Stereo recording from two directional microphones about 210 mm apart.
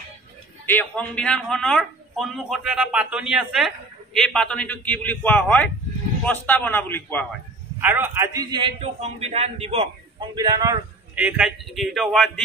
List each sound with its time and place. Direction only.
0.7 s a man's voice: 5° left (ahead or behind)
7.8 s a man's voice: 10° right (ahead or behind); by 9.8 s 30° right (ahead or behind)
10.3 s a man's voice: 20° right (ahead or behind)
11.1 s speech: 5° right (ahead or behind)